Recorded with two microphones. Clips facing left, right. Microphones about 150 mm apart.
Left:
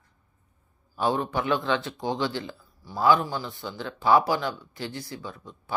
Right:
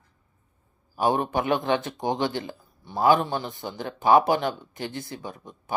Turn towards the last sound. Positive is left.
turn(degrees=-20)  # may be behind; listen again after turning